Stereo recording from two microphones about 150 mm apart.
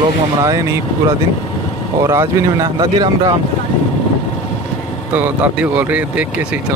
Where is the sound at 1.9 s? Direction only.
20° right (ahead or behind).